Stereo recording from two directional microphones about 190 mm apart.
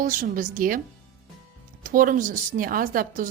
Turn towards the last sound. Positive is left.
turn(degrees=-45)  # may be behind; listen again after turning